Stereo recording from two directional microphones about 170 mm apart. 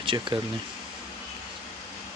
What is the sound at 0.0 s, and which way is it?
Speech, 30° right (ahead or behind).